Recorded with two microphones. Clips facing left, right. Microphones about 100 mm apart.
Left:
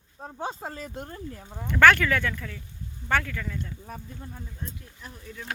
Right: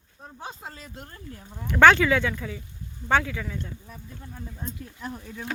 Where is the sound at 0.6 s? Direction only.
45° left (ahead or behind).